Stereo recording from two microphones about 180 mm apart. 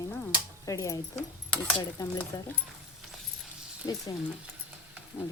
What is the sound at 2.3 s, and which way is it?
Speech, 20° left (ahead or behind).